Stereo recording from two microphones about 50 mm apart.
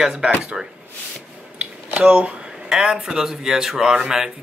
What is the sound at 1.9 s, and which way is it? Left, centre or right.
A woman's voice, right.